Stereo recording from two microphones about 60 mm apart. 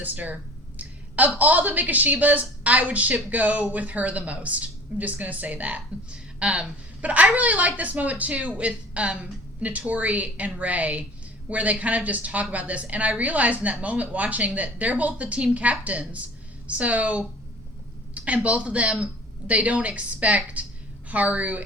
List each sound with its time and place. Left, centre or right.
0.0 s a woman's voice: right
18.4 s a woman's voice: right